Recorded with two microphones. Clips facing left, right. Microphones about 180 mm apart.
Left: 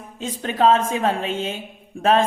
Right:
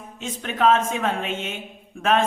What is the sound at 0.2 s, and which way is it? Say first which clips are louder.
Speech: left 3 dB; 35° left (ahead or behind).